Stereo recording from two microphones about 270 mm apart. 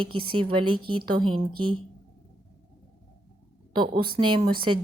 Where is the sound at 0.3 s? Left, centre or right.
Centre.